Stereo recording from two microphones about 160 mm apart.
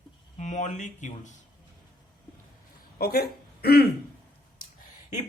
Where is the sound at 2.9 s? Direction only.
75° left (ahead or behind).